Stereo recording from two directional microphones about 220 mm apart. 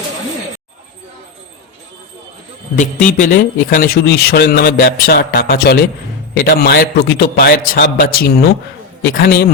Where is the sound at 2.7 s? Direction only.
35° left (ahead or behind).